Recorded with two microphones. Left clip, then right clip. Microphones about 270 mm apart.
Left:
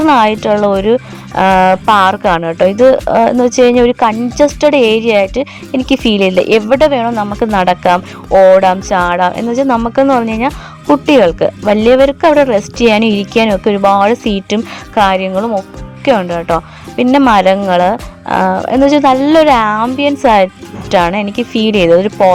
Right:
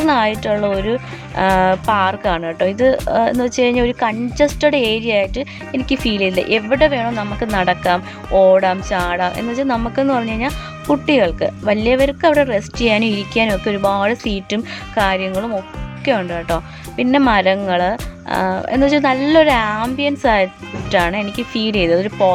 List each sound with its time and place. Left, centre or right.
0.1 s speech: centre